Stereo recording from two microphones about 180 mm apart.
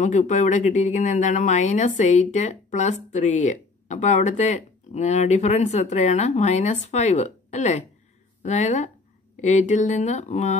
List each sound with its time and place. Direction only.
0.0 s speech: 40° left (ahead or behind)